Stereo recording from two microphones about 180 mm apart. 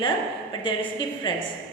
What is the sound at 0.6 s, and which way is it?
Speech, 30° left (ahead or behind).